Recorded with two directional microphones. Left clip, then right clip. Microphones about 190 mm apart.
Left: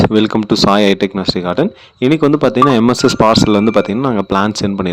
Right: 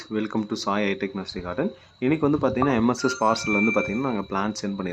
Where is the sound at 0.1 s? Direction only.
55° left (ahead or behind).